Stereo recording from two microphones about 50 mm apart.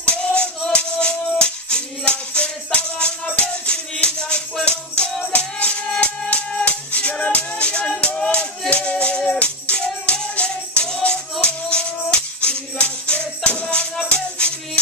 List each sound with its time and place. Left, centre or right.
0.0 s music: left
9.4 s music: left